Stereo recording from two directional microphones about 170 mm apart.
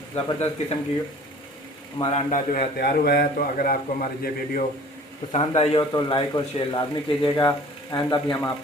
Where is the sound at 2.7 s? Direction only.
70° left (ahead or behind).